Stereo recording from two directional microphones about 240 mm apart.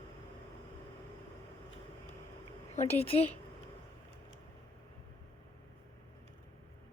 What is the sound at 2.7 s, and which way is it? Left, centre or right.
Speech, left.